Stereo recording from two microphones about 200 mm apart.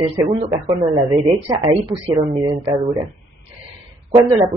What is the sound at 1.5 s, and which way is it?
Speech, 15° right (ahead or behind).